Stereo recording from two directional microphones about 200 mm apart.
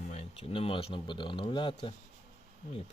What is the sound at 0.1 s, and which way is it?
Speech, 30° left (ahead or behind).